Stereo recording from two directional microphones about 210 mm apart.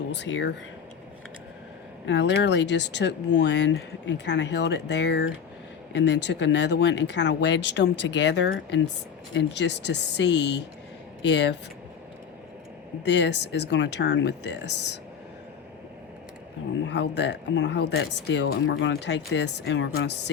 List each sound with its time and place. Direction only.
0.1 s speech: 55° left (ahead or behind)
2.0 s speech: 60° left (ahead or behind)
13.1 s speech: 55° left (ahead or behind)
16.8 s speech: 55° left (ahead or behind)